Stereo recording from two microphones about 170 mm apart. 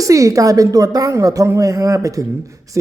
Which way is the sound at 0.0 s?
20° right (ahead or behind).